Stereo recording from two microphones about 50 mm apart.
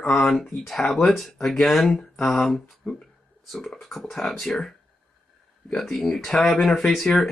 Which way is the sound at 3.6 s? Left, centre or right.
Centre.